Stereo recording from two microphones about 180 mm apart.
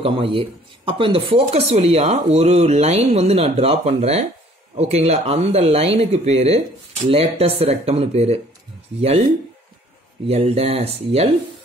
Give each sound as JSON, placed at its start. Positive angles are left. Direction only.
{"t": 0.0, "sound": "speech", "side_deg": -30}
{"t": 10.2, "sound": "speech", "side_deg": -35}